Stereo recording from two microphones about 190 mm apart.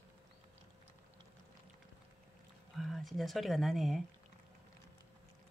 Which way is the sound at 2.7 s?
Centre (ahead or behind).